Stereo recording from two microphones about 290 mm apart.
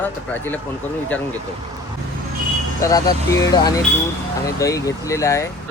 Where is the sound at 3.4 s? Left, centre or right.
Centre.